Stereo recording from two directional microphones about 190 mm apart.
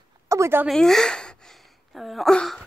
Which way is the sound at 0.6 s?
Centre (ahead or behind).